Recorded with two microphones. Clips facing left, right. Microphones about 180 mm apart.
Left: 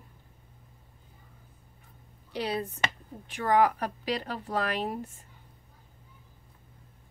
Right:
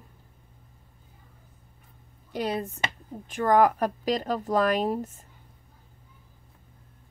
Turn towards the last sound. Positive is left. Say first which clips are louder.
# right 7 dB
turn(degrees=-40)  # may be behind; listen again after turning